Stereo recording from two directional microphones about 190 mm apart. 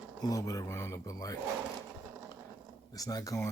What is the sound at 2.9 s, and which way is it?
Speech, 20° left (ahead or behind).